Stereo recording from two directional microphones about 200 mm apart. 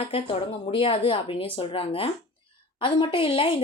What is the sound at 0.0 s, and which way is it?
Speech, 30° left (ahead or behind).